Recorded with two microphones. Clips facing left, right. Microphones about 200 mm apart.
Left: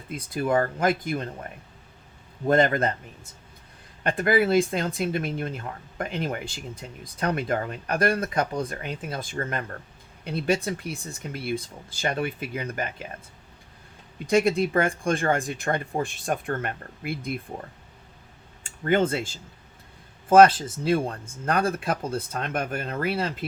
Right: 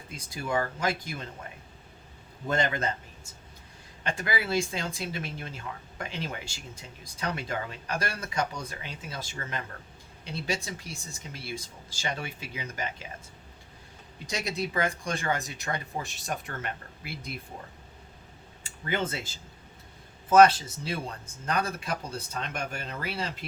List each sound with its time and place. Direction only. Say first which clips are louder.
0.1 s speech: left 7 dB; 55° left (ahead or behind)
4.0 s speech: left 10 dB; 55° left (ahead or behind)
14.3 s speech: left 12 dB; 55° left (ahead or behind)
18.6 s speech: left 9 dB; 50° left (ahead or behind)
20.3 s speech: left 3 dB; 50° left (ahead or behind)